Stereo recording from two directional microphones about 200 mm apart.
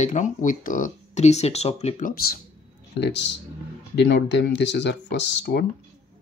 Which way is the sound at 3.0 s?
60° left (ahead or behind).